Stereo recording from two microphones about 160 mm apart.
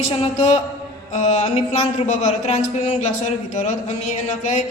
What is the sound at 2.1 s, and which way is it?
A man's voice, 45° left (ahead or behind).